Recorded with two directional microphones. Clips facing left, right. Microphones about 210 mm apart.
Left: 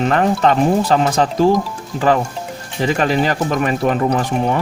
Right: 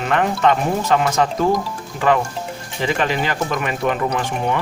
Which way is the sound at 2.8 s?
40° left (ahead or behind).